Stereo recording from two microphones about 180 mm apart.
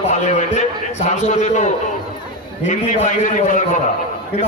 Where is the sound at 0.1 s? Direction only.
40° left (ahead or behind).